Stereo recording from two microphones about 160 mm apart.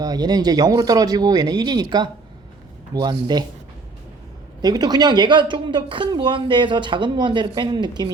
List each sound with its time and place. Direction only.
0.0 s speech: 25° right (ahead or behind)
4.6 s speech: 25° right (ahead or behind)